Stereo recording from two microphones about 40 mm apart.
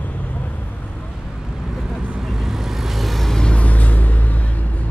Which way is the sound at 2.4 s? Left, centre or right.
Centre.